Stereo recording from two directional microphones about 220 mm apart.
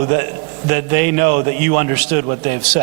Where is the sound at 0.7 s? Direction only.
15° right (ahead or behind).